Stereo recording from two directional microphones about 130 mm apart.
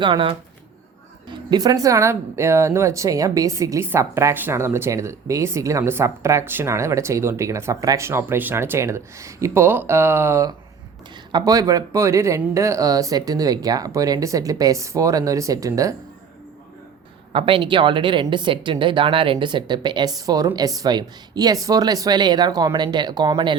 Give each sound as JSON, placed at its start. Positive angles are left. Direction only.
{"t": 0.0, "sound": "a woman's voice", "side_deg": -40}
{"t": 17.3, "sound": "a woman's voice", "side_deg": -45}